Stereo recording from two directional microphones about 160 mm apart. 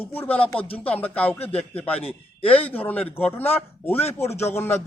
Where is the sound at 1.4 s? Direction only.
40° left (ahead or behind).